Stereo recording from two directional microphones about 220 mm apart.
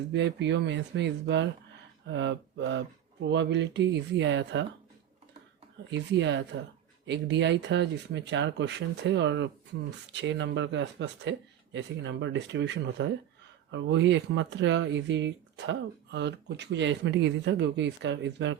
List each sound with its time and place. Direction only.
0.1 s speech: 50° right (ahead or behind)
5.9 s speech: 55° right (ahead or behind)